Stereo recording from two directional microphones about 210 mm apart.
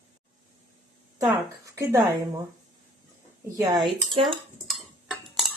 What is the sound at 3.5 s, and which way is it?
Speech, 15° right (ahead or behind).